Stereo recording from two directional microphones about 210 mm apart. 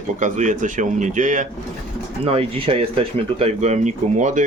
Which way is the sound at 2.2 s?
25° right (ahead or behind).